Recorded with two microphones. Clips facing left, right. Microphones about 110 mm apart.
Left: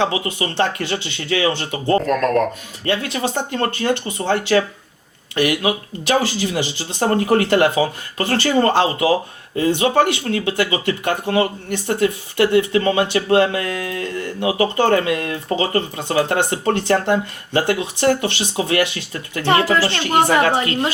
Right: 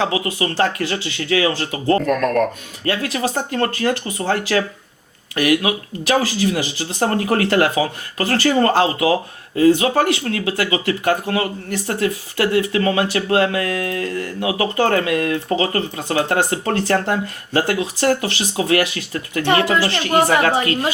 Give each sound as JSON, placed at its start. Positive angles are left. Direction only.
{"t": 0.0, "sound": "speech", "side_deg": 25}
{"t": 19.6, "sound": "a woman's voice", "side_deg": -20}
{"t": 20.0, "sound": "speech", "side_deg": 25}